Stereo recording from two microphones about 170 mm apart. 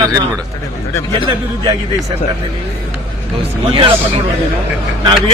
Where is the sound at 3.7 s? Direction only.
30° right (ahead or behind).